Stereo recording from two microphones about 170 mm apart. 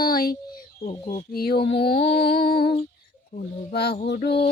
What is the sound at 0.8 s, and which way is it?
Speech, 35° left (ahead or behind).